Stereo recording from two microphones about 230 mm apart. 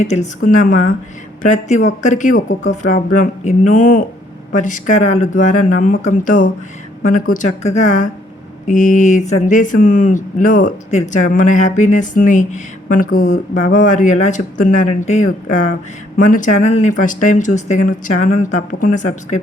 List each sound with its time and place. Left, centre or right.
0.0 s speech: left